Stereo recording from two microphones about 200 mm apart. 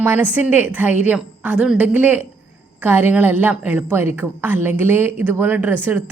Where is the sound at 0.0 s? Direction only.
10° right (ahead or behind).